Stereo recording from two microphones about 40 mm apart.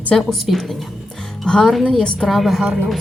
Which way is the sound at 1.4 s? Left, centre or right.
Centre.